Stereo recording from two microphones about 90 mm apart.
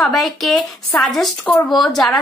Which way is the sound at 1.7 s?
Centre (ahead or behind).